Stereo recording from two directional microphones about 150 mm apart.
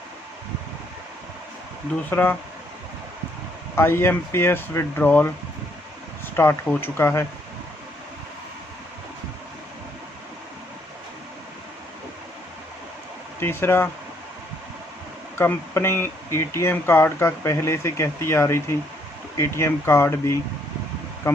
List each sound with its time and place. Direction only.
2.0 s speech: 10° left (ahead or behind)
3.8 s speech: 15° left (ahead or behind)
6.3 s speech: 15° left (ahead or behind)
13.4 s speech: 15° left (ahead or behind)
15.4 s speech: 15° left (ahead or behind)